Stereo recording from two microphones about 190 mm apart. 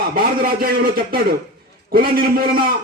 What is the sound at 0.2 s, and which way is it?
A man's voice, 50° right (ahead or behind).